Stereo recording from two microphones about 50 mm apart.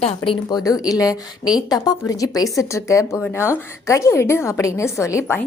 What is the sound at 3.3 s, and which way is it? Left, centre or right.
A woman's voice, left.